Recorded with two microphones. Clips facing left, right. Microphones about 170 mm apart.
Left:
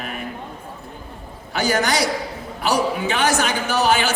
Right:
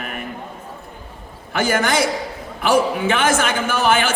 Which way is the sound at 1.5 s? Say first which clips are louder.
Right 2 dB; 50° right (ahead or behind).